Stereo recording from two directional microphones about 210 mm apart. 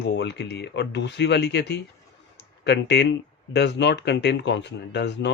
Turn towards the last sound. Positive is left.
turn(degrees=55)  # may be behind; listen again after turning